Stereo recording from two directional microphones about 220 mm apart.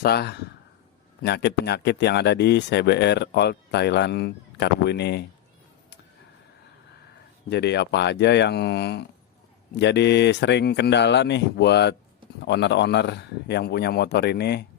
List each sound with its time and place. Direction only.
0.0 s speech: 45° left (ahead or behind)
7.5 s speech: 50° left (ahead or behind)